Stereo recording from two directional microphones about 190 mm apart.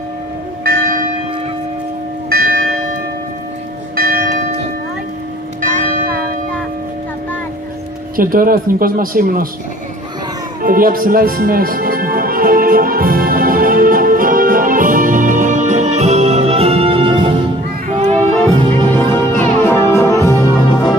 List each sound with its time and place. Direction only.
0.7 s church bell: 50° right (ahead or behind)
2.2 s church bell: 50° right (ahead or behind)
3.9 s church bell: 50° right (ahead or behind)
5.6 s church bell: 45° right (ahead or behind)
8.2 s speech: 50° right (ahead or behind)
10.6 s music: 50° right (ahead or behind); by 17.3 s 25° right (ahead or behind)
17.8 s music: 35° right (ahead or behind)
18.7 s music: 10° left (ahead or behind)